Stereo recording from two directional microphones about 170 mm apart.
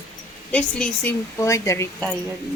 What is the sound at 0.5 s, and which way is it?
Speech, 5° left (ahead or behind).